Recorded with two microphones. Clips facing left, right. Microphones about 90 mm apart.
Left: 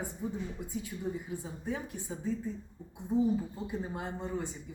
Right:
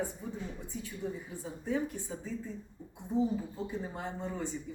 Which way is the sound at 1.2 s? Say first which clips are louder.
Even; 10° left (ahead or behind).